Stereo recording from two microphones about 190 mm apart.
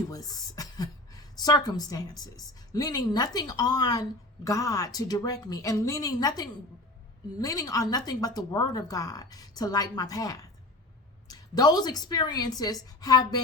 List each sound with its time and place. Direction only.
0.1 s a woman's voice: 20° left (ahead or behind)